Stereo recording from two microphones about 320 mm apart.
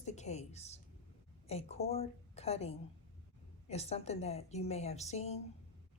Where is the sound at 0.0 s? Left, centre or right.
Left.